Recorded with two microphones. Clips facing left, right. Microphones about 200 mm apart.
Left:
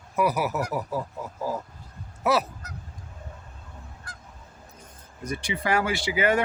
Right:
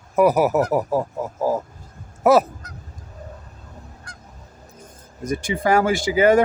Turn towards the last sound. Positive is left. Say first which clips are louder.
# right 8 dB
turn(degrees=-40)  # may be behind; listen again after turning